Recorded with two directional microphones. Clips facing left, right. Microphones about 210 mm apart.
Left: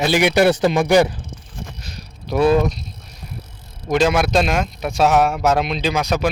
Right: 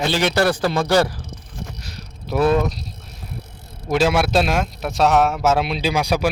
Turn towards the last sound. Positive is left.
turn(degrees=-10)  # may be behind; listen again after turning